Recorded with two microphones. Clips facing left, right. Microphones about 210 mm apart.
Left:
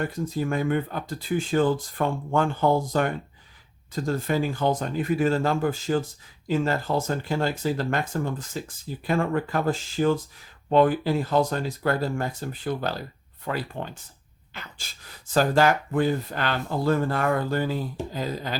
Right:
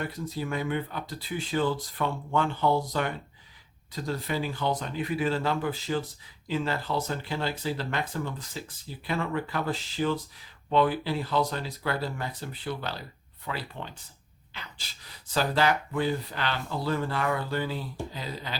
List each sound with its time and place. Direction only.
0.0 s speech: 50° left (ahead or behind)